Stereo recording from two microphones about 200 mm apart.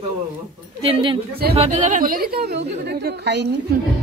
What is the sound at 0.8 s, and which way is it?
A woman's voice, 25° right (ahead or behind).